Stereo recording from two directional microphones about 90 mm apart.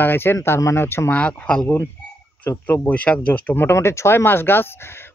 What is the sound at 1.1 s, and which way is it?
Speech, 10° left (ahead or behind).